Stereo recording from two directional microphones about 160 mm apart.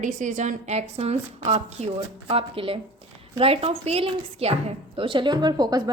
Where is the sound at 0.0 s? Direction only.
50° right (ahead or behind).